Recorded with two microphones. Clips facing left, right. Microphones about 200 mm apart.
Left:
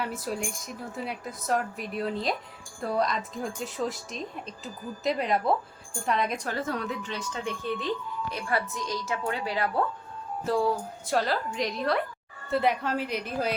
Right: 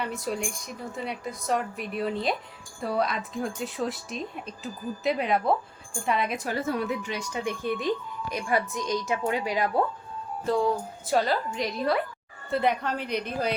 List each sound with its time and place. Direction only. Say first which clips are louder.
0.0 s a woman's voice: right 1 dB; 5° left (ahead or behind); by 9.8 s 15° right (ahead or behind)
10.4 s speech: right 1 dB; 5° left (ahead or behind)